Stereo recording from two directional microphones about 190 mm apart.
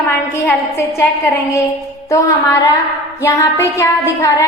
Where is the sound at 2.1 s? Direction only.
15° left (ahead or behind).